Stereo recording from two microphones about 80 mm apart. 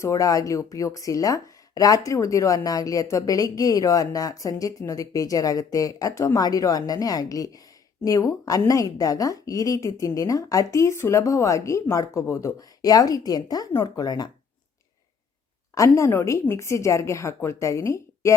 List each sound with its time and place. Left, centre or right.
0.0 s a woman's voice: left
12.5 s a woman's voice: left
15.7 s a woman's voice: left